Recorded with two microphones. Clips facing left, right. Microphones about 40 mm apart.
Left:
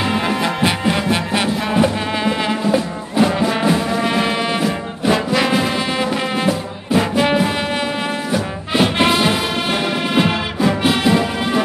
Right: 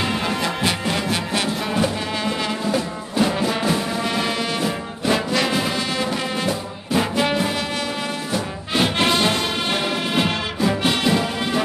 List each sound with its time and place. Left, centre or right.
0.0 s music: centre
4.6 s music: centre